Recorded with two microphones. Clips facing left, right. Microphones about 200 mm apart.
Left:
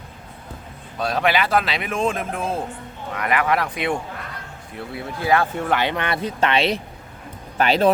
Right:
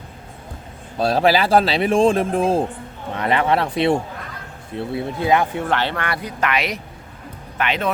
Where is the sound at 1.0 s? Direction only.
35° right (ahead or behind).